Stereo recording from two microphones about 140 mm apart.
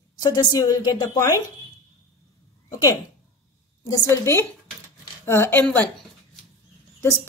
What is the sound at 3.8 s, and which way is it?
A woman's voice, 20° left (ahead or behind).